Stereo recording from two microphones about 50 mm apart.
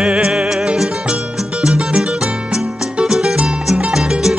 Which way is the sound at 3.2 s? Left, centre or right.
Right.